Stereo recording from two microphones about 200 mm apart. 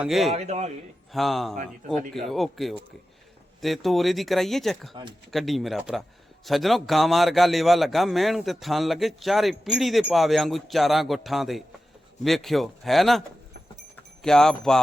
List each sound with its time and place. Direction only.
0.0 s a man's voice: centre (ahead or behind)
0.3 s speech: 35° right (ahead or behind)
1.1 s a man's voice: centre (ahead or behind)